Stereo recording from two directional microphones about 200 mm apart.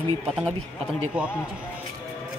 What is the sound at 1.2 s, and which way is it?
Speech, 5° right (ahead or behind).